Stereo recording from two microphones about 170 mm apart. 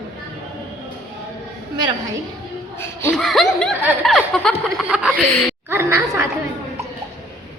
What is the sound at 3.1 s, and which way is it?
Speech, centre (ahead or behind).